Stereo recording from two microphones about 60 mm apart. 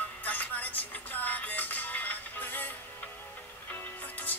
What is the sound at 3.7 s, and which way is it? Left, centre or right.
Music, left.